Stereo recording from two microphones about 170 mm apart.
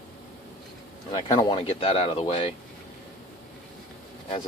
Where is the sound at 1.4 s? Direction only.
30° left (ahead or behind).